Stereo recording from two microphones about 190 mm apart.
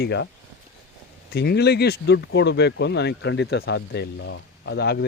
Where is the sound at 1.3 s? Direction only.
60° left (ahead or behind).